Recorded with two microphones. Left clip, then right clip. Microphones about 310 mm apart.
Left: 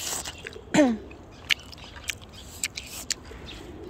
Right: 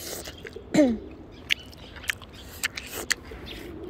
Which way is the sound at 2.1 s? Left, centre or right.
Centre.